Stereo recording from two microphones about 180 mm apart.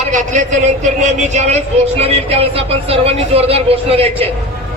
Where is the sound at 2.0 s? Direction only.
35° right (ahead or behind).